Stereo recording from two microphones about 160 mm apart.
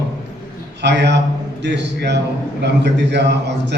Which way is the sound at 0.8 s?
90° right.